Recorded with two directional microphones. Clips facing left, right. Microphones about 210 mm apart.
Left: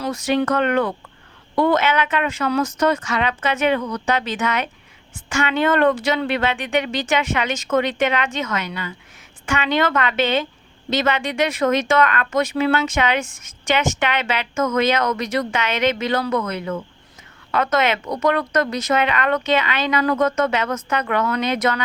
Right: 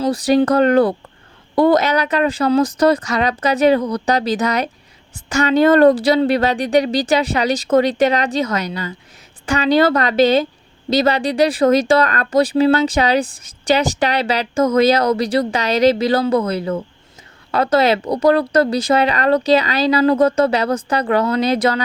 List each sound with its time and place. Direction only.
0.0 s speech: 35° right (ahead or behind)